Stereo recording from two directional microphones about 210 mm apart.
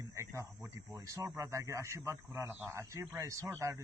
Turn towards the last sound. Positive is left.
turn(degrees=-15)  # may be behind; listen again after turning